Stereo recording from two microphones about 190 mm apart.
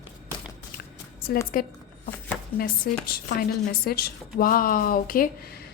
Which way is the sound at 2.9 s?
55° left (ahead or behind).